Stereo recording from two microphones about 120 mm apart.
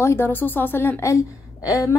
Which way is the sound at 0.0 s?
20° left (ahead or behind).